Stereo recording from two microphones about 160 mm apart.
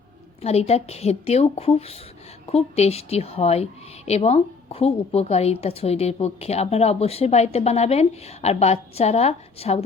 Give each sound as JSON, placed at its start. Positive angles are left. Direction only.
{"t": 0.4, "sound": "a woman's voice", "side_deg": 40}